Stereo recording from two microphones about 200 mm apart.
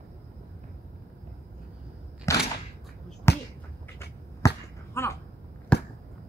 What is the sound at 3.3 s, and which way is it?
Basketball bounce, 10° left (ahead or behind).